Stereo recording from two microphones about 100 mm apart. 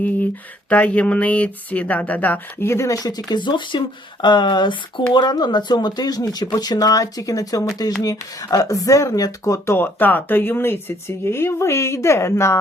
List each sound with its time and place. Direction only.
0.7 s speech: 15° left (ahead or behind)